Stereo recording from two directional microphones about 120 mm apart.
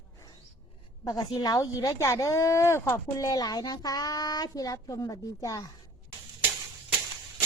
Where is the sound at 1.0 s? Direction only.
30° left (ahead or behind).